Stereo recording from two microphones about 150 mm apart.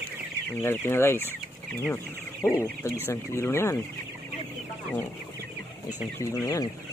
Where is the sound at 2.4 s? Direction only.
15° left (ahead or behind).